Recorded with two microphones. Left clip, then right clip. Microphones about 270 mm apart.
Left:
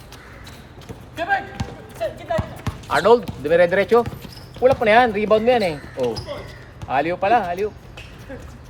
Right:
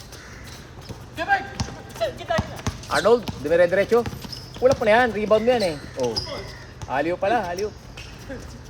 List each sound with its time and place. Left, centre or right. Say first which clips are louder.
1.1 s basketball bounce: even; centre
2.0 s speech: even; centre
2.9 s speech: left 4 dB; left
6.9 s speech: left 4 dB; left